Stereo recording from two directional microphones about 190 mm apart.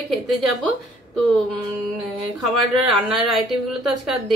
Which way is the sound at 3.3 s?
Centre (ahead or behind).